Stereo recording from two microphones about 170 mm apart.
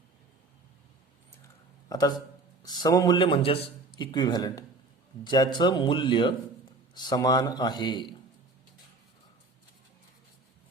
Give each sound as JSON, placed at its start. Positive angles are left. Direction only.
{"t": 1.9, "sound": "a man's voice", "side_deg": 25}